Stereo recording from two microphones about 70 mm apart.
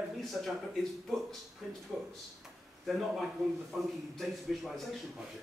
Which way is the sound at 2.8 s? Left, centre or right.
Centre.